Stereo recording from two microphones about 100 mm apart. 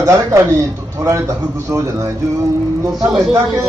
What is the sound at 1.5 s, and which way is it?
Speech, 30° right (ahead or behind).